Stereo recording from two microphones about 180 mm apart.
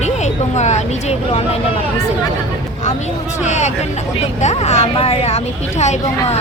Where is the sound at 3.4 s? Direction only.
40° left (ahead or behind).